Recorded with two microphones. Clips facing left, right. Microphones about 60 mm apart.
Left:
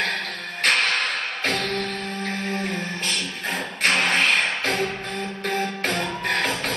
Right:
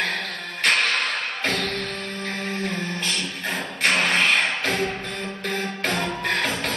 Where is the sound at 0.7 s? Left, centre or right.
Centre.